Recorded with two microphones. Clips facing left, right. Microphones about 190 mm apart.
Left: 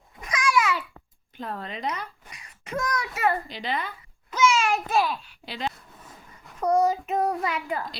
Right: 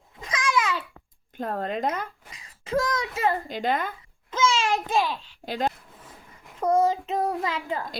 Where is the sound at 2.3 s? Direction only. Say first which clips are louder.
Right 7 dB; 25° right (ahead or behind).